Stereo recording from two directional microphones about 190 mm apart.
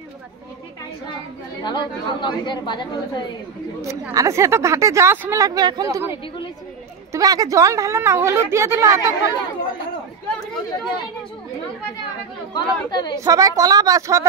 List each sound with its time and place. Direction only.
1.6 s a woman's voice: 25° left (ahead or behind)
3.8 s speech: 15° right (ahead or behind)
12.5 s a woman's voice: 20° left (ahead or behind)
13.2 s speech: 20° right (ahead or behind)